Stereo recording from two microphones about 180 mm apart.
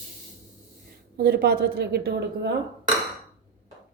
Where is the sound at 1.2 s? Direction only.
60° right (ahead or behind).